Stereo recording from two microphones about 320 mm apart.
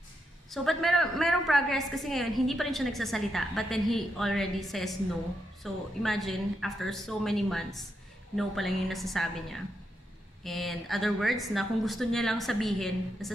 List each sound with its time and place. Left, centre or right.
0.5 s a woman's voice: centre